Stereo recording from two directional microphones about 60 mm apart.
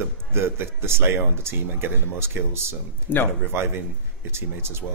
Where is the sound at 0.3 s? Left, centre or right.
Right.